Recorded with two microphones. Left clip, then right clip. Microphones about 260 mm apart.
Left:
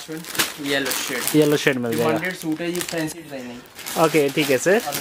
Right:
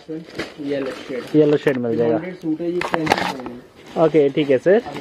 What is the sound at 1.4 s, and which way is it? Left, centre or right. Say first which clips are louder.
Speech: right 3 dB; centre.